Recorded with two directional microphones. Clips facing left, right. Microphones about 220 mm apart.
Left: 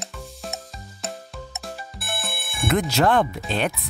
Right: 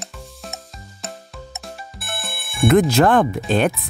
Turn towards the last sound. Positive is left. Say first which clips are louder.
# right 7 dB
turn(degrees=-50)  # may be behind; listen again after turning